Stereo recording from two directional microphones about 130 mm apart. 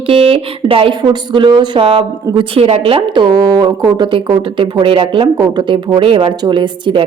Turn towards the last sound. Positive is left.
turn(degrees=-40)  # may be behind; listen again after turning